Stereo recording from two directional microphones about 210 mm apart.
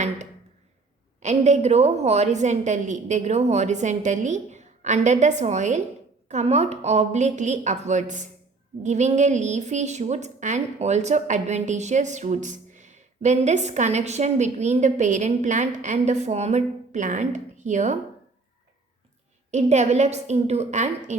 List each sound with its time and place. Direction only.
1.2 s a woman's voice: 35° right (ahead or behind)
19.5 s a woman's voice: 35° right (ahead or behind)